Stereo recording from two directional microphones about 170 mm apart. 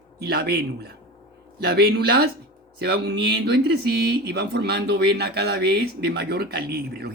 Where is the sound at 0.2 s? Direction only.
70° right (ahead or behind).